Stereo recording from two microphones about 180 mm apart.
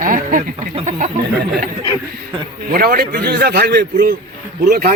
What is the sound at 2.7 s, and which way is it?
A man's voice, 55° right (ahead or behind).